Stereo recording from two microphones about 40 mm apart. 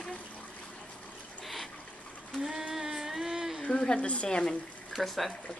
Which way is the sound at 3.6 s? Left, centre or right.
Left.